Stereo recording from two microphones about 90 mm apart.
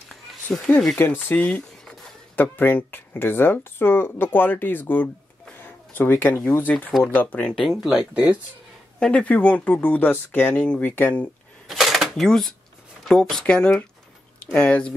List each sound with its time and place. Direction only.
0.5 s speech: 5° left (ahead or behind)
0.9 s a sound: 20° left (ahead or behind)
2.4 s speech: 20° left (ahead or behind)
5.6 s a sound: 25° left (ahead or behind)
6.5 s speech: 20° left (ahead or behind)
7.6 s speech: centre (ahead or behind)
9.0 s speech: 15° left (ahead or behind)
11.6 s a sound: centre (ahead or behind)
13.1 s speech: 5° left (ahead or behind)